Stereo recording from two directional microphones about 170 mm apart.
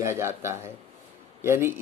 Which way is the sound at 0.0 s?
15° right (ahead or behind).